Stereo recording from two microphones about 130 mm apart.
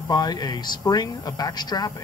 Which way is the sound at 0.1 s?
30° left (ahead or behind).